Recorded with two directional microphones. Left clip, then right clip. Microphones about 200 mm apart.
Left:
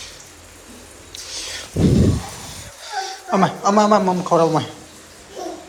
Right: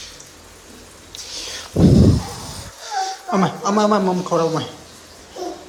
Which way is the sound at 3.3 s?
15° right (ahead or behind).